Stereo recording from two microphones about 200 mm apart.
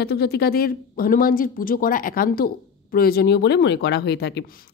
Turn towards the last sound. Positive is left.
turn(degrees=55)  # may be behind; listen again after turning